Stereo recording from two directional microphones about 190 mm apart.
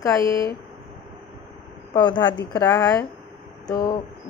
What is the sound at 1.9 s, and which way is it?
A woman's voice, 20° left (ahead or behind).